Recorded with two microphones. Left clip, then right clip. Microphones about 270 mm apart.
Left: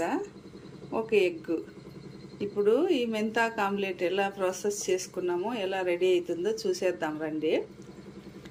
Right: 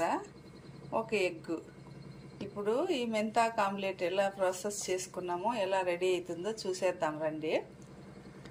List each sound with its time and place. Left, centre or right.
0.9 s a woman's voice: centre
2.6 s a woman's voice: centre